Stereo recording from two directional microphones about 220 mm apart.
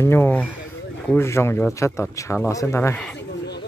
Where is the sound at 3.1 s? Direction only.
50° left (ahead or behind).